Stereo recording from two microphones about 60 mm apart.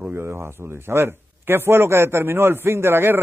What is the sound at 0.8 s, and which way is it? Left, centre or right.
Speech, right.